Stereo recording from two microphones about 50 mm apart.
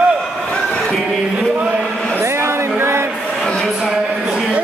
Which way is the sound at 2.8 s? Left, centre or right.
Right.